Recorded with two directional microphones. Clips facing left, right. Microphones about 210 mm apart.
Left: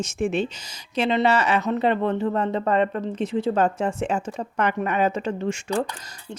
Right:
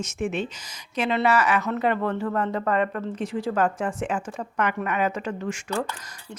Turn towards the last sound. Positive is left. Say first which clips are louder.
# left 4 dB
turn(degrees=25)  # may be behind; listen again after turning